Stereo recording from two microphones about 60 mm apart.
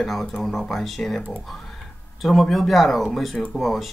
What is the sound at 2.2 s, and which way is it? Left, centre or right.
Speech, centre.